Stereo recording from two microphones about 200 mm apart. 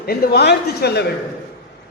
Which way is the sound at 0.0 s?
50° left (ahead or behind).